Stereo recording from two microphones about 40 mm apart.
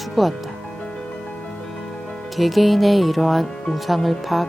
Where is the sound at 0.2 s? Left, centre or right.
Centre.